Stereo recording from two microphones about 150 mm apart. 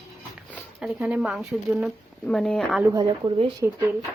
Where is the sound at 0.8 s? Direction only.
5° right (ahead or behind).